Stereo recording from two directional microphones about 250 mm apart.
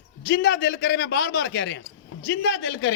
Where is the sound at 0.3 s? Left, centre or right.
Left.